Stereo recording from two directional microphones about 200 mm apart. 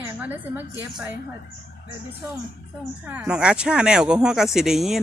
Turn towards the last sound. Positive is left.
turn(degrees=0)  # may be behind; listen again after turning